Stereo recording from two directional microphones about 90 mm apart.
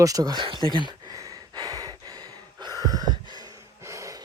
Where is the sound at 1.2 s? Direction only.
45° right (ahead or behind).